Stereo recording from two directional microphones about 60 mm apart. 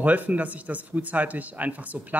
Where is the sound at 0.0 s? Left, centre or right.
Right.